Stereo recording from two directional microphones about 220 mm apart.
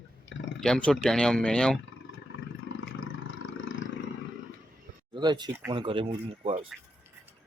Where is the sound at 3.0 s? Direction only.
65° left (ahead or behind).